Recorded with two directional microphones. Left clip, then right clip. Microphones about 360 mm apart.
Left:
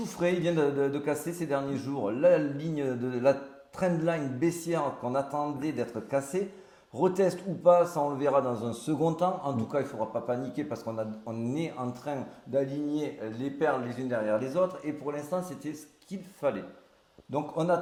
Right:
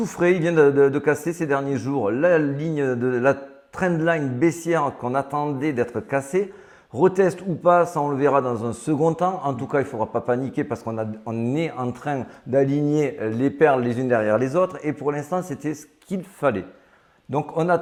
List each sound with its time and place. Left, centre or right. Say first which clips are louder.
0.0 s a man's voice: right 8 dB; right
17.3 s speech: right 7 dB; right